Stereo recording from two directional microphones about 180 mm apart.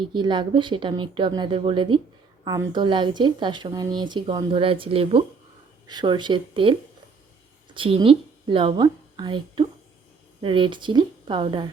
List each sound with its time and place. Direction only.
0.0 s speech: 25° right (ahead or behind)